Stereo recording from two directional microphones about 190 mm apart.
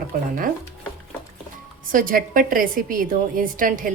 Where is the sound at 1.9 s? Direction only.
45° right (ahead or behind).